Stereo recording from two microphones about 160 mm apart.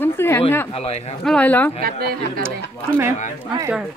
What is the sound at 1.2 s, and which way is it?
Speech, 10° left (ahead or behind).